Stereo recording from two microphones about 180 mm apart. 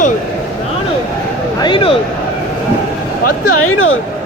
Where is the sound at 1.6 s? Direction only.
30° left (ahead or behind).